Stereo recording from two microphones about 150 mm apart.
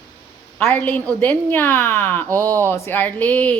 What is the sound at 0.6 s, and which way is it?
Speech, 10° left (ahead or behind).